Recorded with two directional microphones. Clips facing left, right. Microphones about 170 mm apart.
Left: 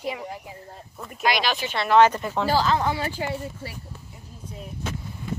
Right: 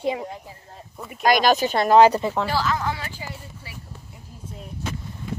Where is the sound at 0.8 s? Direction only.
Centre (ahead or behind).